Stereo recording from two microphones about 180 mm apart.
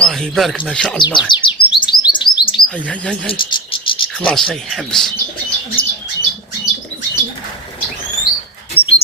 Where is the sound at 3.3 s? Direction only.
25° left (ahead or behind).